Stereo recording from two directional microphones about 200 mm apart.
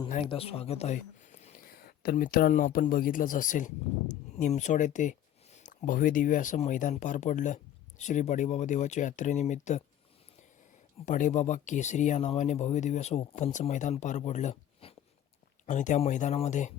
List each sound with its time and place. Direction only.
0.1 s speech: 30° left (ahead or behind)
11.0 s speech: 40° left (ahead or behind)